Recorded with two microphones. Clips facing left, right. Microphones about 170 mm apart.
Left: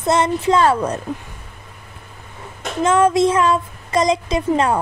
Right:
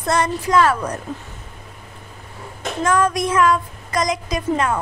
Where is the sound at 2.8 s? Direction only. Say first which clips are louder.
Left 5 dB; 25° left (ahead or behind).